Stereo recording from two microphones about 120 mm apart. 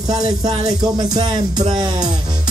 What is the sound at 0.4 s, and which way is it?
Music, 55° right (ahead or behind).